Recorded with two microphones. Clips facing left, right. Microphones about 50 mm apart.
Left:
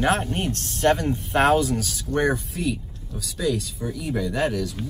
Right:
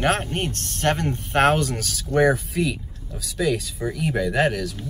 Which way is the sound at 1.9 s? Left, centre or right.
Right.